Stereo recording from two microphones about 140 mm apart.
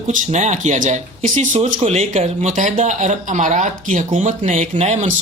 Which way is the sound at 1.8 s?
50° right (ahead or behind).